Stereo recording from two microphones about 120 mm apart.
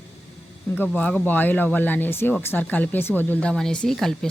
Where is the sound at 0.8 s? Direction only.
10° left (ahead or behind).